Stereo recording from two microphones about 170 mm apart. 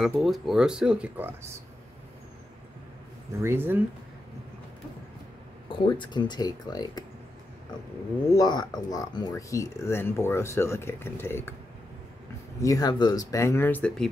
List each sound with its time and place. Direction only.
0.0 s speech: centre (ahead or behind)
3.3 s speech: 15° right (ahead or behind)
5.7 s speech: 30° left (ahead or behind)
8.3 s speech: 25° left (ahead or behind)
12.6 s speech: 20° left (ahead or behind)